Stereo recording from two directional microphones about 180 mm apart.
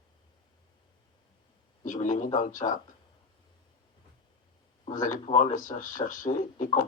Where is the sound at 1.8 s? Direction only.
45° left (ahead or behind).